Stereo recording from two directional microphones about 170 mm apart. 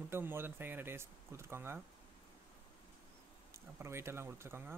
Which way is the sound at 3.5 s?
15° right (ahead or behind).